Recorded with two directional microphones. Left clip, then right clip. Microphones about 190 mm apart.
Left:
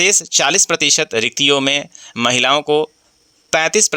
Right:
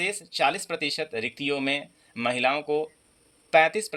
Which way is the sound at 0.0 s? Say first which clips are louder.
Left 11 dB; 55° left (ahead or behind).